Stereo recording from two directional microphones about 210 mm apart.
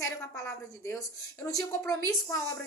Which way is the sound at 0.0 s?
15° left (ahead or behind).